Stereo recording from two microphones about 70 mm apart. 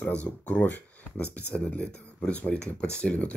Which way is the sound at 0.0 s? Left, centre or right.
Centre.